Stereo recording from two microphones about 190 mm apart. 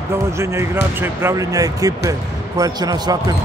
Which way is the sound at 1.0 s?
15° right (ahead or behind).